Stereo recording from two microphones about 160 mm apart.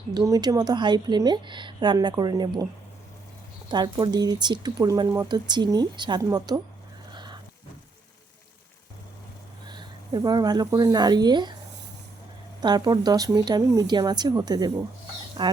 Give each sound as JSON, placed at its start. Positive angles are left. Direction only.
{"t": 0.1, "sound": "speech", "side_deg": -20}
{"t": 3.7, "sound": "speech", "side_deg": -25}
{"t": 7.1, "sound": "a sound", "side_deg": -30}
{"t": 9.6, "sound": "speech", "side_deg": -30}
{"t": 12.6, "sound": "speech", "side_deg": -25}